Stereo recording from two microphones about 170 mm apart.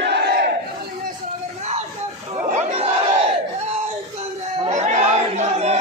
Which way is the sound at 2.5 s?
35° right (ahead or behind).